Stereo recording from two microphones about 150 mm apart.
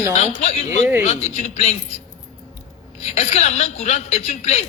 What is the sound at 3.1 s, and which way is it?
A man's voice, 45° left (ahead or behind).